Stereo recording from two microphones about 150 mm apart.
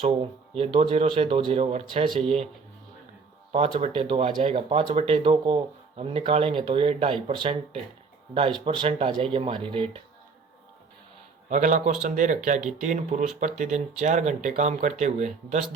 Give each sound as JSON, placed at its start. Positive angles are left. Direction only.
{"t": 0.5, "sound": "speech", "side_deg": -40}
{"t": 3.5, "sound": "speech", "side_deg": -40}
{"t": 11.4, "sound": "a man's voice", "side_deg": -55}